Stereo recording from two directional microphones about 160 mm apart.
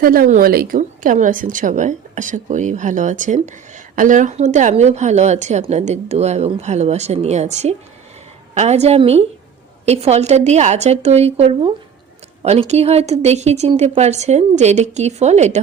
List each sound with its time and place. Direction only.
0.0 s a woman's voice: 65° right (ahead or behind); by 15.6 s 45° right (ahead or behind)